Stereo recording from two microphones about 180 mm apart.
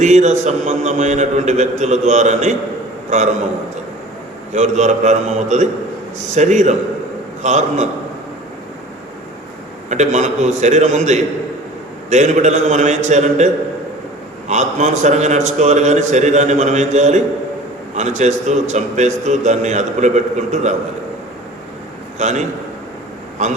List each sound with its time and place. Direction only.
0.0 s a man's voice: 40° right (ahead or behind)
4.5 s a man's voice: 40° right (ahead or behind)
9.9 s a man's voice: 40° right (ahead or behind)
22.2 s a man's voice: 40° right (ahead or behind)